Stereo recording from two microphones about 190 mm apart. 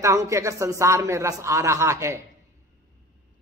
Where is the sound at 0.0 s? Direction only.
15° right (ahead or behind).